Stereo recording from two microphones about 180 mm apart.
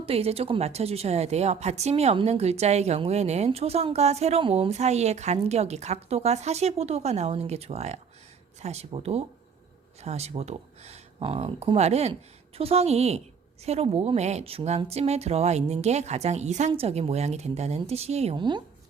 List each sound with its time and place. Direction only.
0.0 s a woman's voice: 35° right (ahead or behind)